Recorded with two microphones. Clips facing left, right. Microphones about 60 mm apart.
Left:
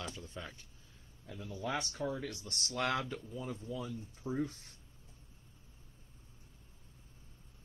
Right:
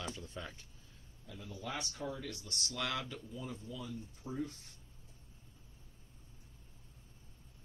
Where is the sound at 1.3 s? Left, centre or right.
Left.